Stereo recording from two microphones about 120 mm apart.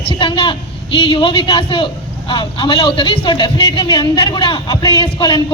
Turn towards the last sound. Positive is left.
turn(degrees=40)  # may be behind; listen again after turning